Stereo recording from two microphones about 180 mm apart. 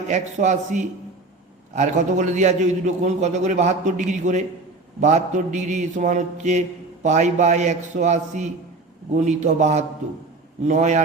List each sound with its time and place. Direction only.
0.1 s a man's voice: 40° right (ahead or behind)